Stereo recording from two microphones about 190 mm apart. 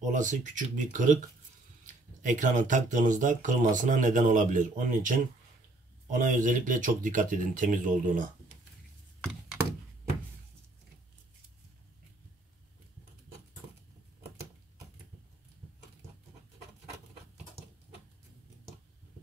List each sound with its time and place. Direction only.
0.1 s speech: 40° right (ahead or behind)